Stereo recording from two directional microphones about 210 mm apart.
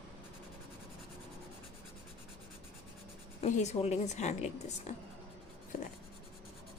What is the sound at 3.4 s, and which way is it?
Speech, 35° left (ahead or behind).